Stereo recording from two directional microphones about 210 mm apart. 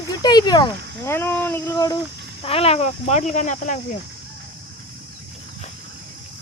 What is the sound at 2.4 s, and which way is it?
Speech, 25° left (ahead or behind).